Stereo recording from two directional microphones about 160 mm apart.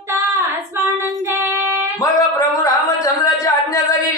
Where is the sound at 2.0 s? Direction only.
20° left (ahead or behind).